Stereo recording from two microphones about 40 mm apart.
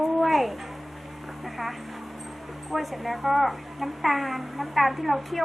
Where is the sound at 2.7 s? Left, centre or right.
Centre.